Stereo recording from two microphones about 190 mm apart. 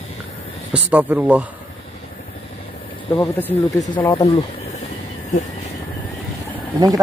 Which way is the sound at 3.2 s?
15° left (ahead or behind).